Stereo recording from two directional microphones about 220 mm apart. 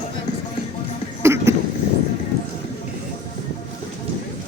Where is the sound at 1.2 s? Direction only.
10° right (ahead or behind).